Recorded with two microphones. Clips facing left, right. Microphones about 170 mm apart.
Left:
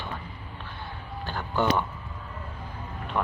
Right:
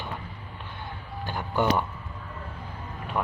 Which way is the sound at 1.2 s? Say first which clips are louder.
Right 1 dB; 15° right (ahead or behind).